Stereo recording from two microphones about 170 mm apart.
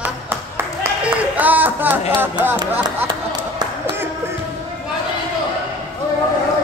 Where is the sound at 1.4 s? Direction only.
10° right (ahead or behind).